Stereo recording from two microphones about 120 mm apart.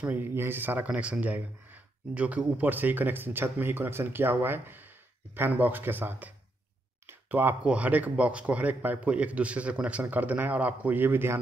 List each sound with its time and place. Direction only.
0.0 s speech: 15° right (ahead or behind)